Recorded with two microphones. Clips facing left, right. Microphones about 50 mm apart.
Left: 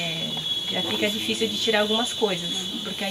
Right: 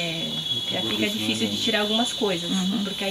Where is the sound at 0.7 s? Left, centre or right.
Centre.